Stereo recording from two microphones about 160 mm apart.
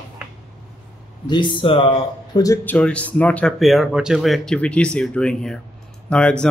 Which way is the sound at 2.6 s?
10° left (ahead or behind).